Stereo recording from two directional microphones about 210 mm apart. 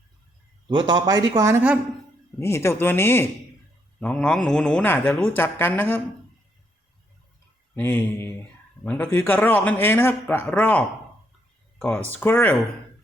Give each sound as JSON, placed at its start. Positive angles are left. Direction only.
{"t": 0.7, "sound": "speech", "side_deg": -20}
{"t": 2.4, "sound": "speech", "side_deg": 10}
{"t": 7.8, "sound": "speech", "side_deg": 10}